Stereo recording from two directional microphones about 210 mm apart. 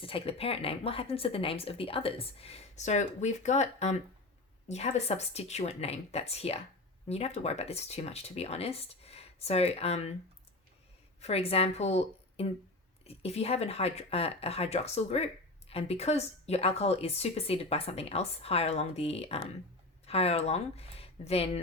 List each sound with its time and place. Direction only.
0.0 s speech: 25° left (ahead or behind)
11.2 s speech: 30° left (ahead or behind)